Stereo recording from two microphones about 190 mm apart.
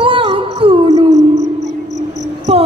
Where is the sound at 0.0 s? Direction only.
30° right (ahead or behind).